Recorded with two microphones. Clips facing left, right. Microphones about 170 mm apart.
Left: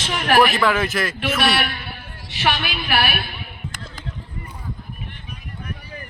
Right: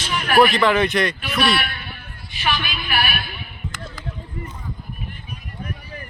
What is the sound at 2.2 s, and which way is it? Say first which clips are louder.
Speech: left 4 dB; 75° left (ahead or behind).